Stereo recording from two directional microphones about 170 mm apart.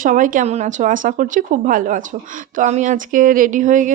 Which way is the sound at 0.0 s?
50° right (ahead or behind).